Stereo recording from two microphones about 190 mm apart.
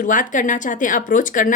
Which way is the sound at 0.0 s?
45° left (ahead or behind).